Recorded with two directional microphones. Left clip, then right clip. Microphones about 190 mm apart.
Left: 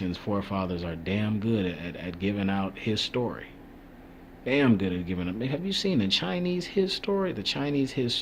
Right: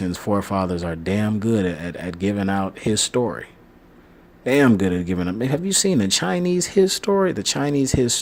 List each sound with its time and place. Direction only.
0.0 s speech: 45° right (ahead or behind)